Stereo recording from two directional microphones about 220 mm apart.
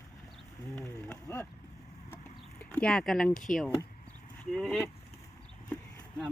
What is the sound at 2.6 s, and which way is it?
Speech, 5° left (ahead or behind).